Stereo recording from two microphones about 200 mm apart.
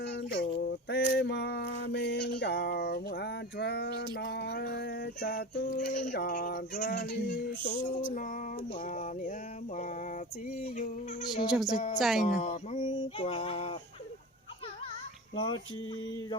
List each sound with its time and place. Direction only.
0.0 s a sound: 55° left (ahead or behind); by 6.1 s 40° left (ahead or behind)
6.1 s female singing: 45° left (ahead or behind)
11.4 s speech: 5° right (ahead or behind)
11.7 s a woman's voice: 35° left (ahead or behind)
11.9 s speech: centre (ahead or behind)
12.3 s music: 35° left (ahead or behind)
15.4 s speech: 25° left (ahead or behind)